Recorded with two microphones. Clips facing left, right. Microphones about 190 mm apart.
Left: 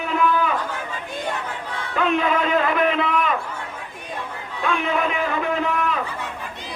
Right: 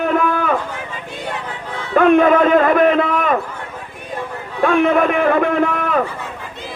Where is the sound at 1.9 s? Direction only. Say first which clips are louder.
Right 10 dB; 50° right (ahead or behind).